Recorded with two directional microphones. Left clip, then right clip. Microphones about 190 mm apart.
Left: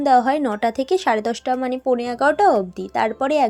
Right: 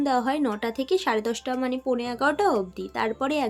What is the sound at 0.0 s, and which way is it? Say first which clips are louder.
A woman's voice: left 8 dB; 30° left (ahead or behind).